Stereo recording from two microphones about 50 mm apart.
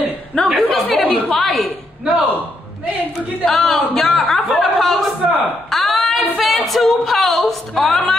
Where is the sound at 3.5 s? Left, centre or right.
Centre.